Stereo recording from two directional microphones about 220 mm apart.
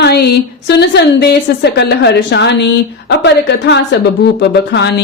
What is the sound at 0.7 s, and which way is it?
A woman's voice, 50° left (ahead or behind).